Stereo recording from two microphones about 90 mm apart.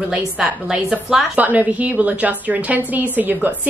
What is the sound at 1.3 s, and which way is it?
A woman's voice, 15° right (ahead or behind).